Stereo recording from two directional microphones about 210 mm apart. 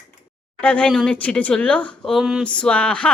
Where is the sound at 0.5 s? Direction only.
5° left (ahead or behind).